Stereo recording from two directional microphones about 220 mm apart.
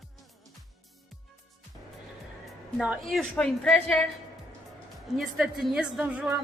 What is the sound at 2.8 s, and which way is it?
A woman's voice, centre (ahead or behind).